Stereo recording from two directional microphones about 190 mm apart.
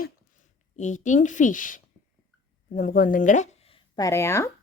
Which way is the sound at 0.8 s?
40° left (ahead or behind).